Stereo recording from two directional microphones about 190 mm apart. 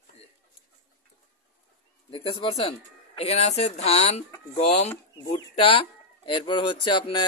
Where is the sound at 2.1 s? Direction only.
30° left (ahead or behind).